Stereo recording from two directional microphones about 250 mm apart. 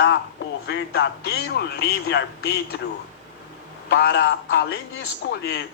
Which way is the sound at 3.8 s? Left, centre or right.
Left.